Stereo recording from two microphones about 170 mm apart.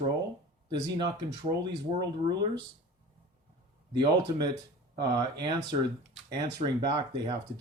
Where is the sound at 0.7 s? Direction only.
25° right (ahead or behind).